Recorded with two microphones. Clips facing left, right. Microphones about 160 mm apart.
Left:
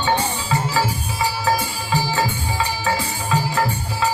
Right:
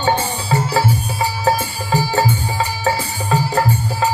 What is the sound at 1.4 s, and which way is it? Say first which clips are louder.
Music: right 3 dB; 45° right (ahead or behind).